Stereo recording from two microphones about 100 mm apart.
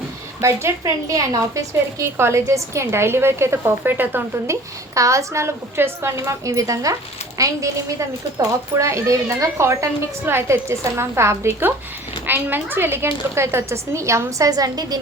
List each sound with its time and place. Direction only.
0.4 s a woman's voice: 30° right (ahead or behind)
4.9 s a woman's voice: 30° right (ahead or behind)